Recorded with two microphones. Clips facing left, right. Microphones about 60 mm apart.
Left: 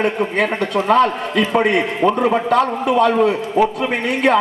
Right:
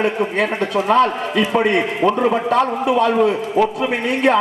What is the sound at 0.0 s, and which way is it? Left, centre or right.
A man's voice, centre.